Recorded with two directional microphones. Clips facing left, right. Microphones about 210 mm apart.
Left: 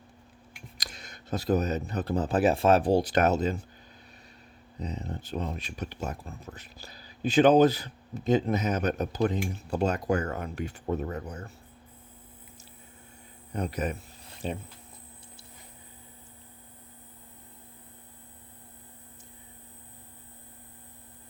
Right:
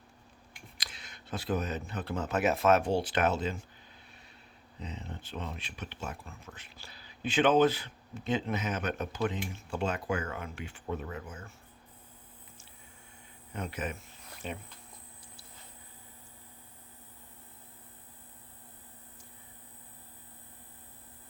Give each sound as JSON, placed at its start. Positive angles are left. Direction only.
{"t": 0.8, "sound": "speech", "side_deg": 40}
{"t": 4.8, "sound": "speech", "side_deg": 40}
{"t": 13.5, "sound": "speech", "side_deg": 40}